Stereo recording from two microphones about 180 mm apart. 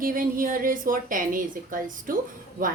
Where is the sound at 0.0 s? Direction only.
50° right (ahead or behind).